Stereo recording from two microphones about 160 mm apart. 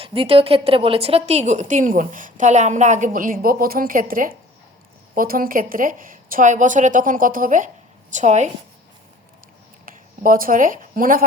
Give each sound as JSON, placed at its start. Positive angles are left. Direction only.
{"t": 0.0, "sound": "a woman's voice", "side_deg": -35}
{"t": 9.8, "sound": "speech", "side_deg": -60}